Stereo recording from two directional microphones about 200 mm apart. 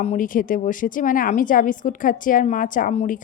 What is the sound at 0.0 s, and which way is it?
A woman's voice, 35° left (ahead or behind).